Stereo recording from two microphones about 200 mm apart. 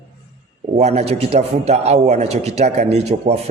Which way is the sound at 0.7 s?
35° right (ahead or behind).